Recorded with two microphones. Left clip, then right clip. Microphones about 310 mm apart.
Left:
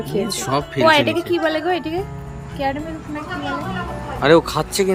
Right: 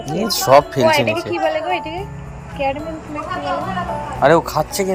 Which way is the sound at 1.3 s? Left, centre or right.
Left.